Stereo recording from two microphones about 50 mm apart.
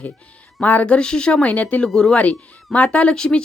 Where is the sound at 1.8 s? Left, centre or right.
Centre.